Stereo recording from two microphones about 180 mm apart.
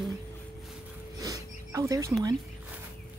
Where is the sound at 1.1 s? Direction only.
20° right (ahead or behind).